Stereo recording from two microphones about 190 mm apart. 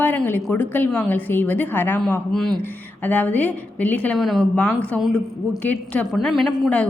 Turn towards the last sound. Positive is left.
turn(degrees=5)  # may be behind; listen again after turning